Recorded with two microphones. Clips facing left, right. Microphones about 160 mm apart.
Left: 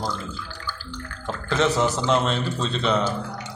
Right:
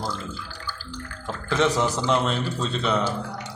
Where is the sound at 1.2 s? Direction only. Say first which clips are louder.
Even; 10° right (ahead or behind).